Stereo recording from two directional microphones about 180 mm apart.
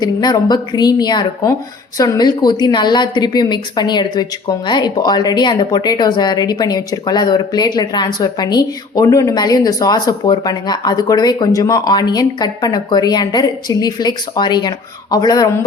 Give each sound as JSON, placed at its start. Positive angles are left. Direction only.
{"t": 0.0, "sound": "a woman's voice", "side_deg": 25}